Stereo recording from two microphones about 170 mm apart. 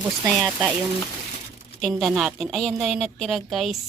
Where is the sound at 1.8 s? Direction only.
Centre (ahead or behind).